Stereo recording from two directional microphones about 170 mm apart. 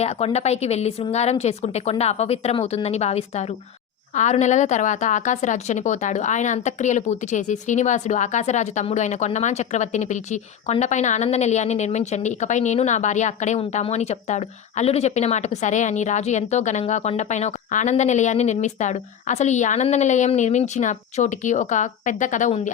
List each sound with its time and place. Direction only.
0.0 s a woman's voice: 40° left (ahead or behind)